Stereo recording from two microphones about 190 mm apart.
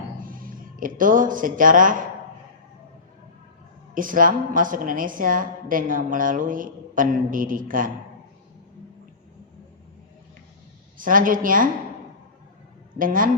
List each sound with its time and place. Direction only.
0.2 s speech: 45° right (ahead or behind)
3.9 s a woman's voice: 45° right (ahead or behind)
10.9 s a woman's voice: 45° right (ahead or behind)
13.0 s a woman's voice: 45° right (ahead or behind)